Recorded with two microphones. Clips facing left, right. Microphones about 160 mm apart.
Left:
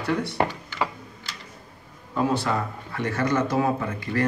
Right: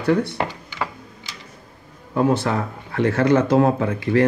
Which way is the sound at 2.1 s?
60° right (ahead or behind).